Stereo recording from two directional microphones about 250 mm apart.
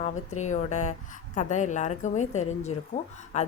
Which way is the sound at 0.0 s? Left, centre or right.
Left.